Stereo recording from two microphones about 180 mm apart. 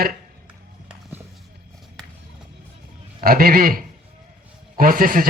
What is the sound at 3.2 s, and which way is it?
Speech, 55° right (ahead or behind).